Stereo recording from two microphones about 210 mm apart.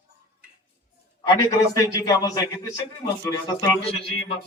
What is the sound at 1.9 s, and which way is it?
A man's voice, 20° left (ahead or behind).